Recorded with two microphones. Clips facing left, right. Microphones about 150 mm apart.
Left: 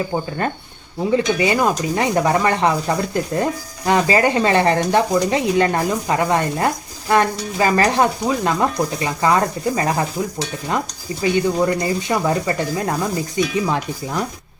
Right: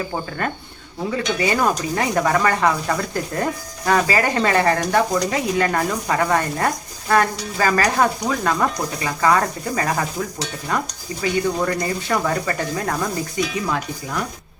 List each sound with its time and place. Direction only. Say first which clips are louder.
0.1 s stir: left 3 dB; 20° left (ahead or behind)
11.2 s stir: left 3 dB; 20° left (ahead or behind)